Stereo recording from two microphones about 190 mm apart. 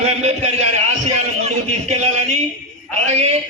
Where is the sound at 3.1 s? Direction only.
35° right (ahead or behind).